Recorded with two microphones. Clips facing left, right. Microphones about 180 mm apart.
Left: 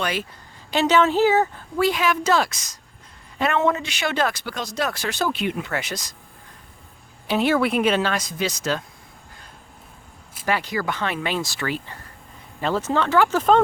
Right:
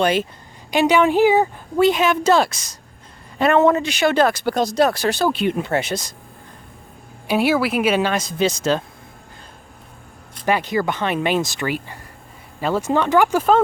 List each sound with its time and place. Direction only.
0.0 s a woman's voice: 25° right (ahead or behind)
0.7 s a woman's voice: 15° right (ahead or behind); by 2.7 s 30° right (ahead or behind)
3.3 s speech: 45° right (ahead or behind)
7.3 s speech: 10° right (ahead or behind)
8.1 s a woman's voice: 25° right (ahead or behind)
10.4 s a woman's voice: 20° right (ahead or behind)